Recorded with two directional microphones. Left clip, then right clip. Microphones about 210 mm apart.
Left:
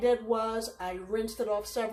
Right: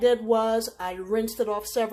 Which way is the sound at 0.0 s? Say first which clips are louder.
Right 6 dB; 50° right (ahead or behind).